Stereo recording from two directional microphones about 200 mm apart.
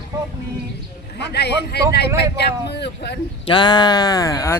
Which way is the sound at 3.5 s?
20° left (ahead or behind).